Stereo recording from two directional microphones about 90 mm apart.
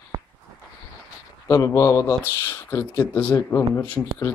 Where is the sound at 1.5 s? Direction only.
35° left (ahead or behind).